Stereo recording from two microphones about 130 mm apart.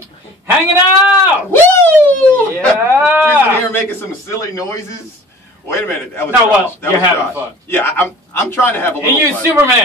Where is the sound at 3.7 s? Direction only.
20° left (ahead or behind).